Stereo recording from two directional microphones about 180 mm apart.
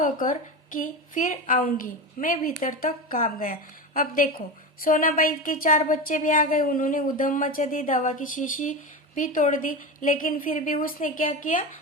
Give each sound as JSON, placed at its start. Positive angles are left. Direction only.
{"t": 0.0, "sound": "a woman's voice", "side_deg": 50}